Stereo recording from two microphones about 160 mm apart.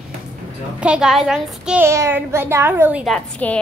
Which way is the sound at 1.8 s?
15° right (ahead or behind).